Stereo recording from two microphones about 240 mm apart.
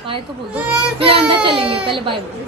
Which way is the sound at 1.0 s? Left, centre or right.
Right.